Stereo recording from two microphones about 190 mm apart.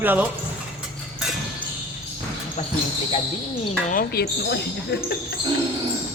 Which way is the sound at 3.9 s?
50° left (ahead or behind).